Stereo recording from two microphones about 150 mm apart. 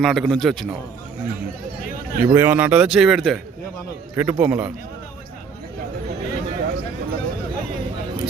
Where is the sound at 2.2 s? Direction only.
15° right (ahead or behind).